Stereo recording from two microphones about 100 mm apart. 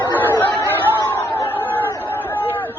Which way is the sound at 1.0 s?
25° left (ahead or behind).